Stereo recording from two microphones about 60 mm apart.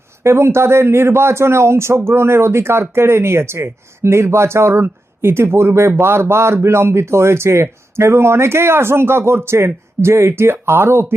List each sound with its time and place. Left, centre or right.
0.2 s speech: right